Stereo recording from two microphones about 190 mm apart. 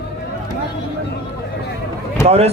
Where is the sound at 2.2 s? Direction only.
35° right (ahead or behind).